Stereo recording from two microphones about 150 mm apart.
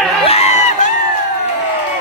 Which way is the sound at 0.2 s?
45° left (ahead or behind).